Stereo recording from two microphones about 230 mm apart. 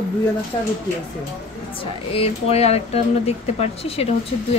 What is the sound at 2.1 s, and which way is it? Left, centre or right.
A woman's voice, left.